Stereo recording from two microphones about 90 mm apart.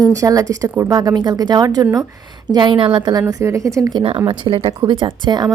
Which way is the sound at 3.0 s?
45° right (ahead or behind).